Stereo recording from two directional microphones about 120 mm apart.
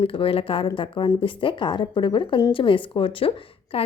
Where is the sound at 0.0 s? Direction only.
50° left (ahead or behind).